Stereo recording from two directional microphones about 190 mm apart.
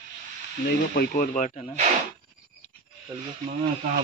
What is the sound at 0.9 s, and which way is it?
Speech, 50° left (ahead or behind).